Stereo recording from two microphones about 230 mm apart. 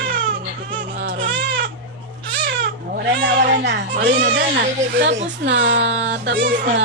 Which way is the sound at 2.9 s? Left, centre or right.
Right.